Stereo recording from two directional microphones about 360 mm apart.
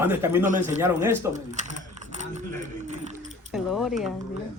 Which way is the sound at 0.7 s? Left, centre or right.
Centre.